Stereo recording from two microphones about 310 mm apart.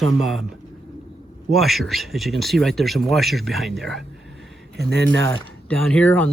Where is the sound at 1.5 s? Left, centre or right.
Centre.